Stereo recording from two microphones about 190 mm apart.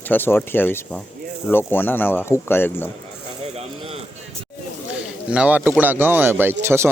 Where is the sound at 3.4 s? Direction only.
30° right (ahead or behind).